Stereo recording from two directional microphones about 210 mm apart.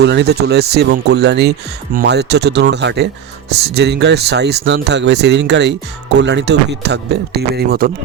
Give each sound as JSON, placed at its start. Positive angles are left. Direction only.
{"t": 0.0, "sound": "speech", "side_deg": -55}